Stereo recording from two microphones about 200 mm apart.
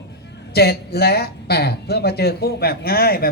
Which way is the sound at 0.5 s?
55° left (ahead or behind).